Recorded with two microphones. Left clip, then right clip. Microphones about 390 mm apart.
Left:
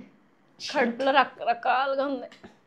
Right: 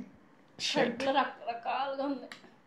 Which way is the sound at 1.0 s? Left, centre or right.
Left.